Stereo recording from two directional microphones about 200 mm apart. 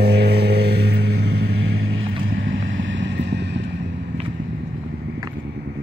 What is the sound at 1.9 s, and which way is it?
Vehicle, 80° right.